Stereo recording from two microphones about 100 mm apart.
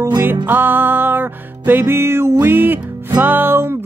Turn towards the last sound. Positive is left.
turn(degrees=-20)  # may be behind; listen again after turning